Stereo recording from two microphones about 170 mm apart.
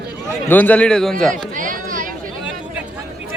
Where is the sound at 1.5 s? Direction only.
50° right (ahead or behind).